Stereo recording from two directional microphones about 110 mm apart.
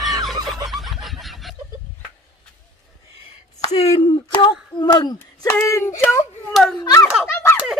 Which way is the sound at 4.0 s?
45° left (ahead or behind).